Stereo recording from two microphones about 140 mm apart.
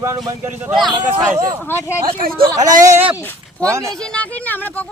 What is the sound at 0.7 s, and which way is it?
Speech, centre (ahead or behind).